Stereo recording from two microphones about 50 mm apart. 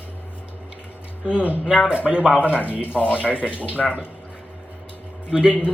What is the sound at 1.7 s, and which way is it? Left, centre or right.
Speech, centre.